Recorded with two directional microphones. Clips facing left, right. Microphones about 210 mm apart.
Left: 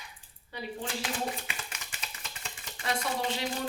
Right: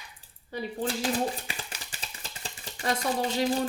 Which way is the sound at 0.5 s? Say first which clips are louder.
Right 6 dB; 35° right (ahead or behind).